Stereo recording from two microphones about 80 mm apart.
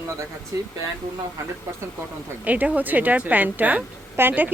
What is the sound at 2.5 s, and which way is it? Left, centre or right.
A woman's voice, centre.